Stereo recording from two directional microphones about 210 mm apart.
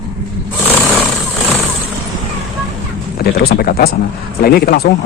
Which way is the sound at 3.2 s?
45° left (ahead or behind).